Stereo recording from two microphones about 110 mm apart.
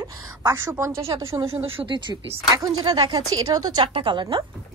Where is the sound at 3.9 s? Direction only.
50° right (ahead or behind).